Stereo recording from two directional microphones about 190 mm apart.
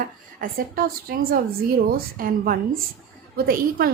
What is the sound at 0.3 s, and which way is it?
A woman's voice, 50° right (ahead or behind).